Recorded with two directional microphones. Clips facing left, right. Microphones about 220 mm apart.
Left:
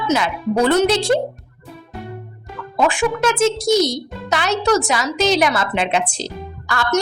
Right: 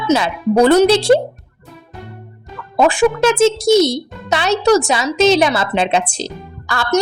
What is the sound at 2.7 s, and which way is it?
A child's voice, 40° right (ahead or behind).